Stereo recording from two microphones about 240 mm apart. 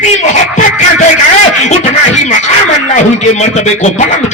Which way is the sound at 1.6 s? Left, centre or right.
Left.